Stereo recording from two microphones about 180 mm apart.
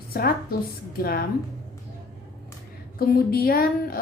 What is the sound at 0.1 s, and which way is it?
A woman's voice, 55° left (ahead or behind).